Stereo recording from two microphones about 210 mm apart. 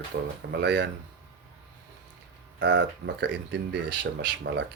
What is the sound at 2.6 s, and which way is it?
Speech, 60° right (ahead or behind).